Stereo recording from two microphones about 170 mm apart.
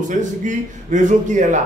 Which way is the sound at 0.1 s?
45° right (ahead or behind).